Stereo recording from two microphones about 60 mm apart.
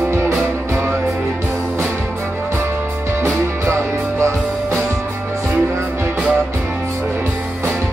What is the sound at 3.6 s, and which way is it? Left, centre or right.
Music, right.